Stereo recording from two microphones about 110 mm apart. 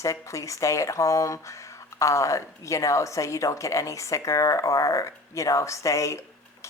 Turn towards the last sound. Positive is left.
turn(degrees=25)  # may be behind; listen again after turning